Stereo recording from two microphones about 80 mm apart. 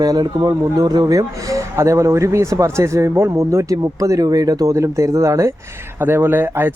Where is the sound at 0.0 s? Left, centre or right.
Right.